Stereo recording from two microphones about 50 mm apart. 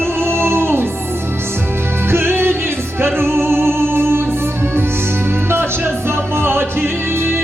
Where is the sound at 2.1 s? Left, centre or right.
Right.